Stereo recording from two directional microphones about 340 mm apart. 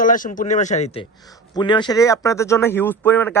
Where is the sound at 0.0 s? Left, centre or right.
Left.